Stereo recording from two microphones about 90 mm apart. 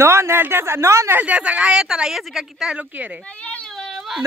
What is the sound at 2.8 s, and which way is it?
Speech, 15° right (ahead or behind).